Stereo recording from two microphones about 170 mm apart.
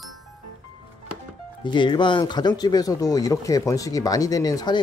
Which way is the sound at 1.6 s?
30° left (ahead or behind).